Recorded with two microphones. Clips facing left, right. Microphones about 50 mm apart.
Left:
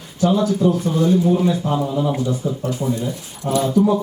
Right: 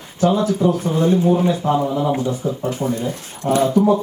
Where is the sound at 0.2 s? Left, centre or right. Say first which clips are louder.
Even; right.